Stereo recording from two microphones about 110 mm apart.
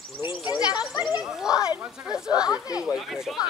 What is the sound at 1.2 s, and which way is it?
Speech, 5° right (ahead or behind).